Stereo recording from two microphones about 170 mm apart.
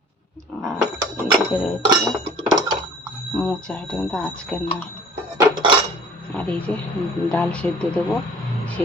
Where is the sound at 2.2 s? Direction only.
30° right (ahead or behind).